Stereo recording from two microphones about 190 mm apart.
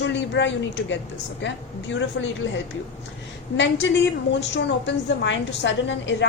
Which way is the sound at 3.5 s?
75° left (ahead or behind).